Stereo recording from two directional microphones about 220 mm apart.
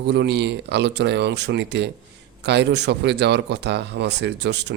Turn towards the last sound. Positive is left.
turn(degrees=-50)  # may be behind; listen again after turning